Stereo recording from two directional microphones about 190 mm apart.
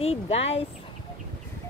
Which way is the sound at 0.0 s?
35° left (ahead or behind).